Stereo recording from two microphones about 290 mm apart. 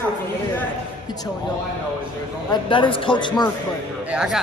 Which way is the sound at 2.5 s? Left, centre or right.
Centre.